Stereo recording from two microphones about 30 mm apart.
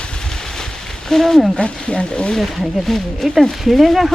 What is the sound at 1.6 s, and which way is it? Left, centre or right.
Speech, left.